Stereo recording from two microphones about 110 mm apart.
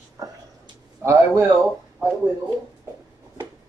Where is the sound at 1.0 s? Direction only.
20° right (ahead or behind).